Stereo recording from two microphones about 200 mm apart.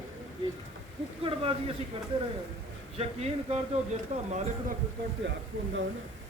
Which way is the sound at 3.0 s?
30° right (ahead or behind).